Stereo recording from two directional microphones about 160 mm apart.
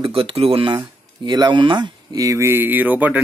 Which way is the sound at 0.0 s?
35° right (ahead or behind).